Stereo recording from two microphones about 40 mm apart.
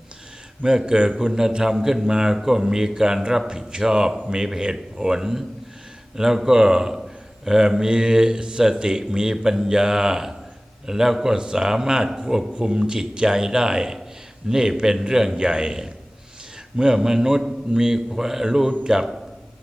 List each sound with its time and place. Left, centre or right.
0.6 s a man's voice: centre